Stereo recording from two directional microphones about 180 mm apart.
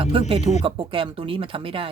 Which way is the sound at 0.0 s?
30° right (ahead or behind).